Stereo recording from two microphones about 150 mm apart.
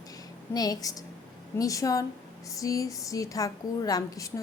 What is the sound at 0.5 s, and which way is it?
A woman's voice, 25° left (ahead or behind).